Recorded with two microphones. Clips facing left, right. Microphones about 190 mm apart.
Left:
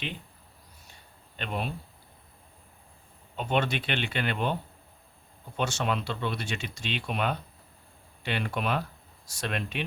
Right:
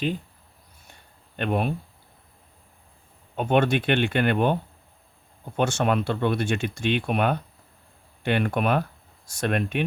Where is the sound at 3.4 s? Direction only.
50° right (ahead or behind).